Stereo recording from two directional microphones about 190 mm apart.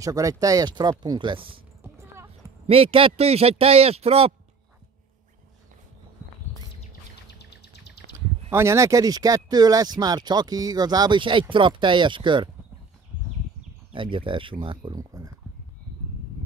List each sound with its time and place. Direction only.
0.0 s speech: 15° right (ahead or behind)
2.6 s a man's voice: 30° right (ahead or behind)
7.2 s a sound: 60° left (ahead or behind)
8.5 s speech: 15° right (ahead or behind)
13.9 s speech: 25° right (ahead or behind)